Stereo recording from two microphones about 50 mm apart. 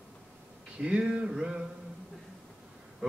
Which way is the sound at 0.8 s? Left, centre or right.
Right.